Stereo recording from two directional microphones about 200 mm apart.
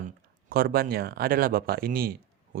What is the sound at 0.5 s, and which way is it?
Speech, 50° right (ahead or behind).